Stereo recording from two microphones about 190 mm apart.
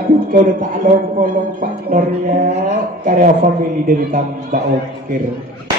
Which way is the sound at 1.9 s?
45° right (ahead or behind).